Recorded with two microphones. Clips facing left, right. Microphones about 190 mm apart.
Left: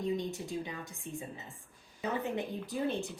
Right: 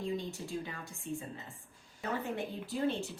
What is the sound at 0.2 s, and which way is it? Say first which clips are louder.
Speech: left 2 dB; 20° left (ahead or behind).